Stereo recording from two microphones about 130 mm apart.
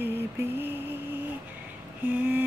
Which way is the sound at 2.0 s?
15° right (ahead or behind).